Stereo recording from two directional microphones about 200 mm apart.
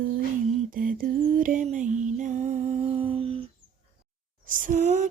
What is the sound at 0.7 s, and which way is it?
Lullaby, 45° right (ahead or behind).